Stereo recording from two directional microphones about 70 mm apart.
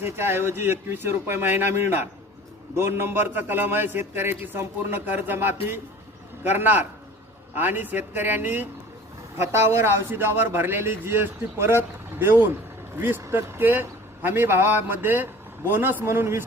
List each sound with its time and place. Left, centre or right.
0.0 s a man's voice: right